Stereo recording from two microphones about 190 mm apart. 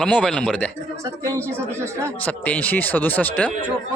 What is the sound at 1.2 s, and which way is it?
Speech, 15° right (ahead or behind).